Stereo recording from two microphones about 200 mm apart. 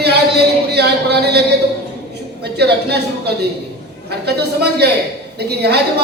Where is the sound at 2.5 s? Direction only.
55° right (ahead or behind).